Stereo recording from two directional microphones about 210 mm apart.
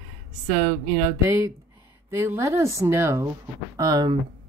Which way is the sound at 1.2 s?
15° right (ahead or behind).